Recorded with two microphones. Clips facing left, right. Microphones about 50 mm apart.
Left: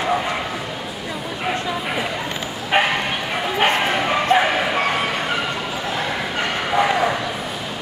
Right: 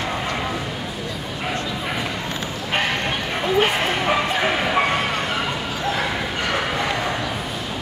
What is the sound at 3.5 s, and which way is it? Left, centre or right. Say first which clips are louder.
Bow-wow: left 2 dB; centre.